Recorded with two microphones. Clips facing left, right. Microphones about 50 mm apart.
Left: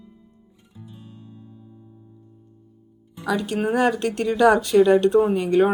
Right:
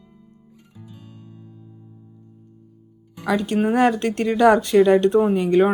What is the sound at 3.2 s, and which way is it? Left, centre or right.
Speech, right.